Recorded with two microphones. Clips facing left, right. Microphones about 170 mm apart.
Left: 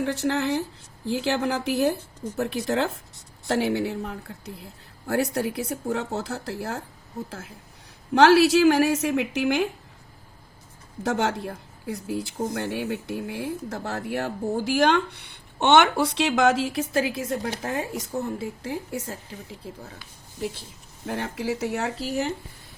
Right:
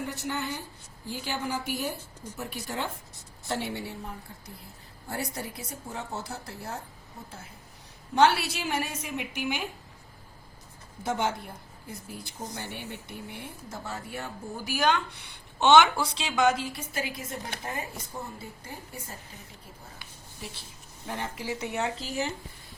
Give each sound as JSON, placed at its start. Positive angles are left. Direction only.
{"t": 0.0, "sound": "a woman's voice", "side_deg": 85}
{"t": 11.0, "sound": "a woman's voice", "side_deg": 85}
{"t": 12.4, "sound": "speech", "side_deg": 75}
{"t": 21.1, "sound": "speech", "side_deg": 80}